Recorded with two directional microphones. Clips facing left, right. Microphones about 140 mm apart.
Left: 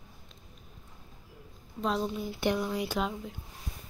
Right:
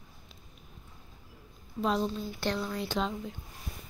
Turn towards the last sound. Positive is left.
turn(degrees=5)  # may be behind; listen again after turning